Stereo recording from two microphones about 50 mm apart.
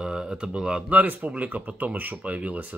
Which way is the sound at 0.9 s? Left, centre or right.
Right.